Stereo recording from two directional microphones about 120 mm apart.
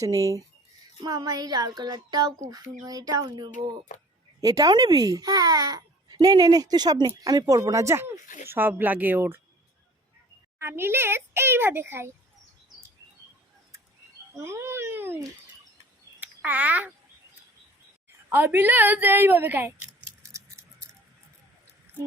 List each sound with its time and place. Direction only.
0.0 s a child's voice: 30° right (ahead or behind)
3.5 s speech: 90° left
4.4 s a child's voice: 30° right (ahead or behind)
10.6 s speech: 20° right (ahead or behind)
14.3 s a sound: 20° right (ahead or behind)
16.2 s speech: 10° right (ahead or behind)
18.3 s a woman's voice: 15° right (ahead or behind)
20.3 s a sound: 20° right (ahead or behind)